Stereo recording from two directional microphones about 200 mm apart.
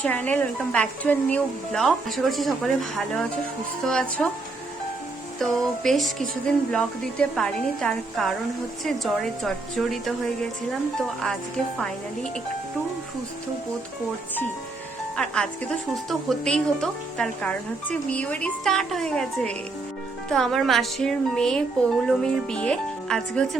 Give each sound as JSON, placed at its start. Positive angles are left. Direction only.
{"t": 0.0, "sound": "speech", "side_deg": 10}
{"t": 5.4, "sound": "speech", "side_deg": 0}
{"t": 15.1, "sound": "speech", "side_deg": 5}